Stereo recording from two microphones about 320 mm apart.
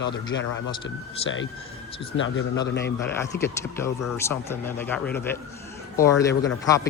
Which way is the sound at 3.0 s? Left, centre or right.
Centre.